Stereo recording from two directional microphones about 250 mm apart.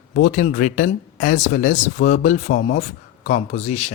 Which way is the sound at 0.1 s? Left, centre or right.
Left.